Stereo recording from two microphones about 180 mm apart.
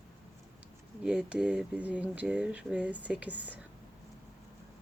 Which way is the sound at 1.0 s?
5° right (ahead or behind).